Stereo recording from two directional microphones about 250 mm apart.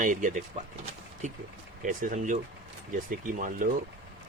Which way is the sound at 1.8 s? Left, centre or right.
Right.